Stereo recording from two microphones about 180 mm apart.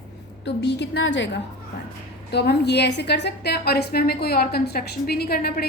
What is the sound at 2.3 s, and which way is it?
A woman's voice, 65° left (ahead or behind).